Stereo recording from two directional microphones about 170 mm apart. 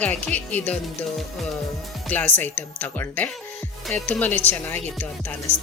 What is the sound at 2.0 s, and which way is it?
Speech, 10° left (ahead or behind).